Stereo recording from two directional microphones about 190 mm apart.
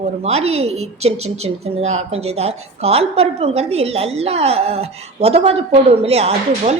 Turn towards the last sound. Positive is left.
turn(degrees=-30)  # may be behind; listen again after turning